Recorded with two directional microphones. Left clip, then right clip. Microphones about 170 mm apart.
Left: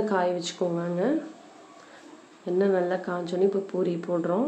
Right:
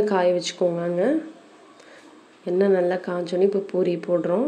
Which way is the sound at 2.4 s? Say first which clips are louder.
Right 4 dB; 15° right (ahead or behind).